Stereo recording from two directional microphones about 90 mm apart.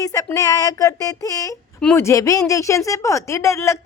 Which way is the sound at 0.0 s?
40° left (ahead or behind).